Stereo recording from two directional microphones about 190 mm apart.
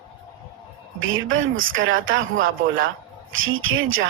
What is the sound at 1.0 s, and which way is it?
A woman's voice, 90° right.